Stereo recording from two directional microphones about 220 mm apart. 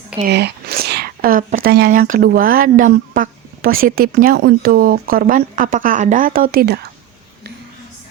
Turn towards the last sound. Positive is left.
turn(degrees=-45)  # may be behind; listen again after turning